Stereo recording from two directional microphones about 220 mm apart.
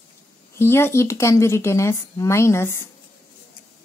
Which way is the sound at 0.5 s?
10° left (ahead or behind).